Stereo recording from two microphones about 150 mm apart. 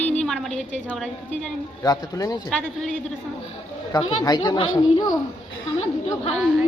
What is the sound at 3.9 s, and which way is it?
A child's voice, 30° left (ahead or behind).